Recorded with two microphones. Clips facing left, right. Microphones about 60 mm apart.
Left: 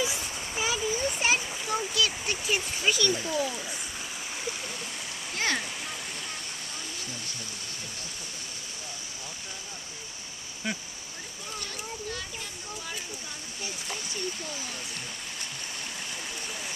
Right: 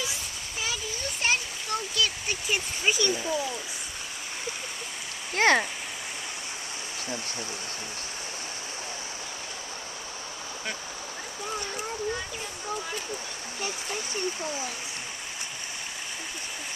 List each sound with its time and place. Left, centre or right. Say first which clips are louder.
0.0 s splash: left 4 dB; left; by 2.6 s centre
2.8 s a child's voice: right 2 dB; centre
5.3 s speech: right 9 dB; right